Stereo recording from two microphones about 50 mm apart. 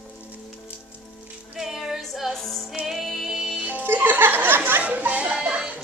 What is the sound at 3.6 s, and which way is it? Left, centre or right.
Music, right.